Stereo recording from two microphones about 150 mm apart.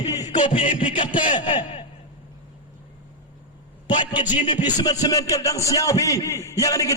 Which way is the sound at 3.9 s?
30° left (ahead or behind).